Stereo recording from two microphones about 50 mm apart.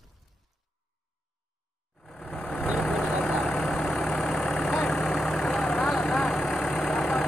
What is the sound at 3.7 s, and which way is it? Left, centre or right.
Vehicle, left.